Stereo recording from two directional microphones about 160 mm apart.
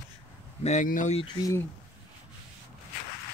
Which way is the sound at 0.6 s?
50° left (ahead or behind).